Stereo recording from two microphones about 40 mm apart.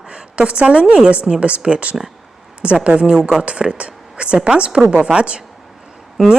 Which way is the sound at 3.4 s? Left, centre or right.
Right.